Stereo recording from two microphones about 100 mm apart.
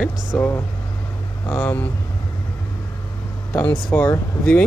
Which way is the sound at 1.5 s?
20° left (ahead or behind).